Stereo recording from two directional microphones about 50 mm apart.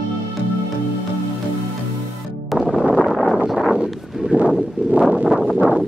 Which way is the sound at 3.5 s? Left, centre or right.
Centre.